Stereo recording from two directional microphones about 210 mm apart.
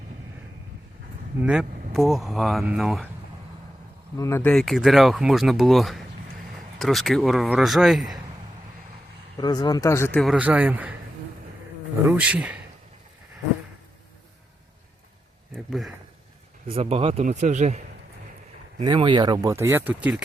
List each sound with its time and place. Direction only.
1.4 s speech: 5° right (ahead or behind)
4.2 s speech: 10° left (ahead or behind)
9.4 s speech: 20° left (ahead or behind); by 10.9 s 5° right (ahead or behind)
12.0 s speech: 5° right (ahead or behind)
15.5 s a sound: centre (ahead or behind)
16.6 s a man's voice: 30° right (ahead or behind); by 20.0 s 10° right (ahead or behind)